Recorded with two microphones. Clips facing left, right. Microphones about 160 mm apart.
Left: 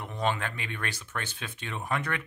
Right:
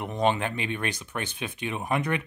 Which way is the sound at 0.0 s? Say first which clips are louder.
Right 5 dB; 20° right (ahead or behind).